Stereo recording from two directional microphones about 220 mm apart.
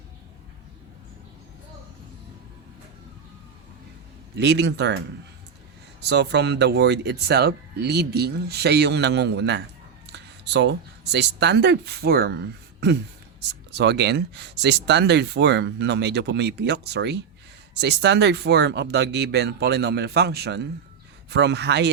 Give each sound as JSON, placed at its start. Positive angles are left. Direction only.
{"t": 4.4, "sound": "speech", "side_deg": -50}
{"t": 6.0, "sound": "speech", "side_deg": -50}
{"t": 13.4, "sound": "speech", "side_deg": -50}